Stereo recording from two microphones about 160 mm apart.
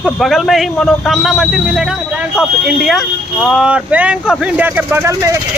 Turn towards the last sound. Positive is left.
turn(degrees=-15)  # may be behind; listen again after turning